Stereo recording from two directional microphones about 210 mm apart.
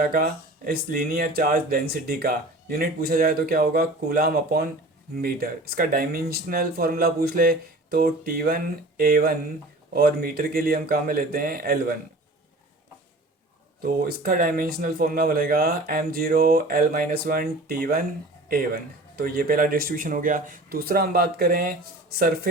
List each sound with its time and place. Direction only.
0.0 s speech: 45° right (ahead or behind)
13.8 s speech: 45° right (ahead or behind)